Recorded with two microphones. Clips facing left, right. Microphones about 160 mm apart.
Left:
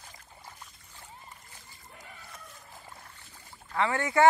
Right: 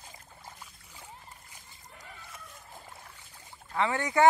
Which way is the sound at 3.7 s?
15° right (ahead or behind).